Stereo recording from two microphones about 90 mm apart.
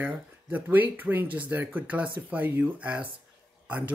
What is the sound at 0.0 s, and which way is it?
Speech, 20° right (ahead or behind).